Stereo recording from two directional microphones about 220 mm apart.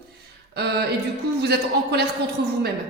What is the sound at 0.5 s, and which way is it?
Speech, 50° right (ahead or behind).